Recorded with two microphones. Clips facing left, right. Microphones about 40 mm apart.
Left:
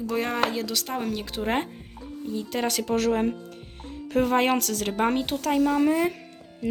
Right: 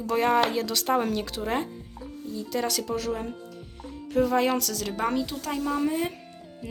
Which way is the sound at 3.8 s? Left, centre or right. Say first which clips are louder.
Left 1 dB; left.